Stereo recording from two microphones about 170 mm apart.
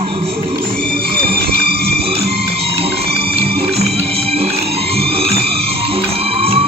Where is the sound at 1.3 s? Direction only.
65° right (ahead or behind).